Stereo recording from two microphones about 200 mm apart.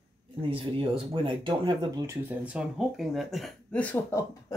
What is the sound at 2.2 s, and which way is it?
Speech, 5° right (ahead or behind).